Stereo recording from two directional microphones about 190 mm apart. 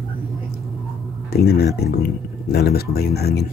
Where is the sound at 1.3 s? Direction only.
55° left (ahead or behind).